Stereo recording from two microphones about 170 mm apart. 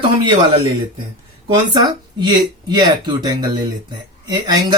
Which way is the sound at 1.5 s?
25° right (ahead or behind).